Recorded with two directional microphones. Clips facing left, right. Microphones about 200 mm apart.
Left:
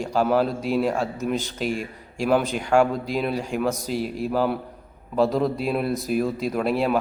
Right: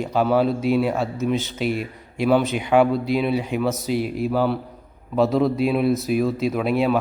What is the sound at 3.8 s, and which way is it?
Speech, 40° left (ahead or behind).